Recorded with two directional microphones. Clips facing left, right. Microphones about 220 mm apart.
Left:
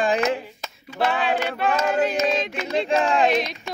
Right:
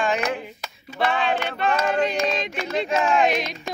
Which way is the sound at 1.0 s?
5° left (ahead or behind).